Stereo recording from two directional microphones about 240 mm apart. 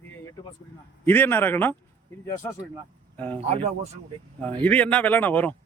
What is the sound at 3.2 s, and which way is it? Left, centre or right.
Speech, centre.